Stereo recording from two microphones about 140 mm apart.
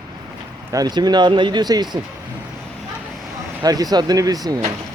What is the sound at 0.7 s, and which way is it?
Speech, 30° right (ahead or behind).